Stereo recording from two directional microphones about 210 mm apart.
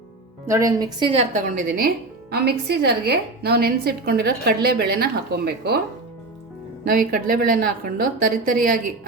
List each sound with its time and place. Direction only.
0.4 s a woman's voice: 15° right (ahead or behind); by 5.8 s 50° right (ahead or behind)
6.8 s a woman's voice: 40° right (ahead or behind)